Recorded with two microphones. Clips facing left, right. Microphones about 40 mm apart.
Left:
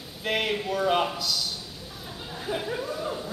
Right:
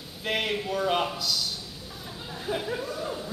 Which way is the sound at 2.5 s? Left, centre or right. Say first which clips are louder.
Even; centre.